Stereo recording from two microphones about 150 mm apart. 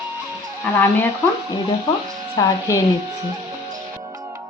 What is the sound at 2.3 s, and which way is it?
Speech, 20° left (ahead or behind).